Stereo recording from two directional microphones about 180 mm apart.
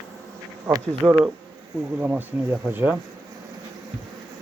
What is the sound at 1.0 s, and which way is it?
Speech, 10° right (ahead or behind).